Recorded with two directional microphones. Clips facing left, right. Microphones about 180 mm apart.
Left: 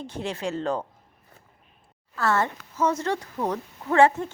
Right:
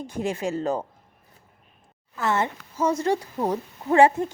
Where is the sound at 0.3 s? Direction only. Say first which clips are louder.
Right 2 dB; 10° right (ahead or behind).